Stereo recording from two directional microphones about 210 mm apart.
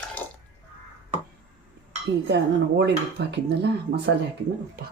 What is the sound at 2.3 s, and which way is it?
Speech, 55° right (ahead or behind).